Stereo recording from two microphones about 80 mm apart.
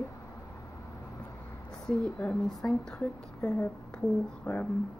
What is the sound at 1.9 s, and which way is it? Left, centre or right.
Speech, centre.